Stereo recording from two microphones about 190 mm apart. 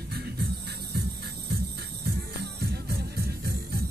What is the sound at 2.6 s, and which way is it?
Music, 55° right (ahead or behind).